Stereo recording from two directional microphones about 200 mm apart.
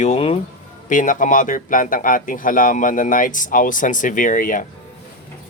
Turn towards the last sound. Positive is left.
turn(degrees=40)  # may be behind; listen again after turning